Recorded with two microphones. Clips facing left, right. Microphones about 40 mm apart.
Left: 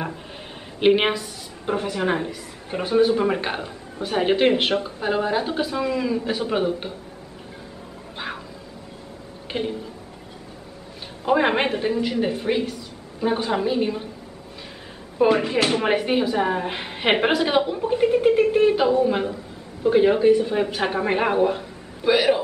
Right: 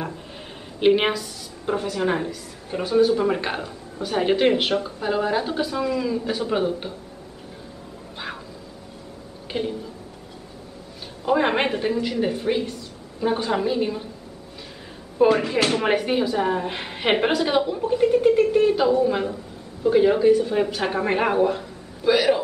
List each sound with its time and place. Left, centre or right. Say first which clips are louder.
0.7 s a man's voice: even; centre
3.4 s speech: even; centre
9.5 s a woman's voice: even; centre
11.2 s speech: left 1 dB; centre
11.5 s speech: even; centre
15.1 s a woman's voice: even; centre